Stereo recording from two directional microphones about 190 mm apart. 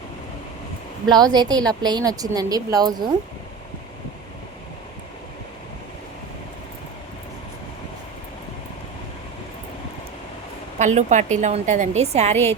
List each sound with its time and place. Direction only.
1.0 s a woman's voice: 20° right (ahead or behind)
10.8 s a woman's voice: 40° right (ahead or behind)